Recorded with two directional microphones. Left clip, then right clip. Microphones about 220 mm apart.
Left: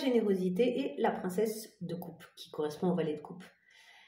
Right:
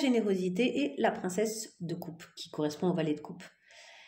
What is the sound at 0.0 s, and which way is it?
A woman's voice, 35° right (ahead or behind).